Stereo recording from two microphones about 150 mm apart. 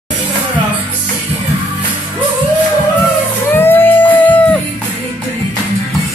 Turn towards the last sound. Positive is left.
turn(degrees=10)  # may be behind; listen again after turning